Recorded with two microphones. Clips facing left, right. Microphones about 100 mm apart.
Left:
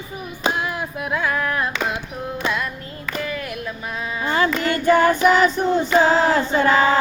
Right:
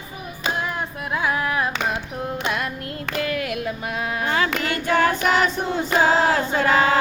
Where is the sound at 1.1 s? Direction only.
15° right (ahead or behind).